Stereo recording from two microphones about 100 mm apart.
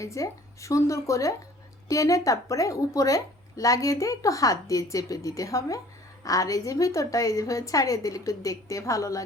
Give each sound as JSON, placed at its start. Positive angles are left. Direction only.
{"t": 0.0, "sound": "a woman's voice", "side_deg": 30}